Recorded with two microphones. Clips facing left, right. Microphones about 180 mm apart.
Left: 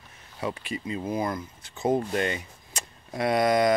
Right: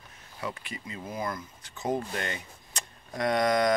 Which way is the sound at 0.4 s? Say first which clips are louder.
Left 6 dB; 25° left (ahead or behind).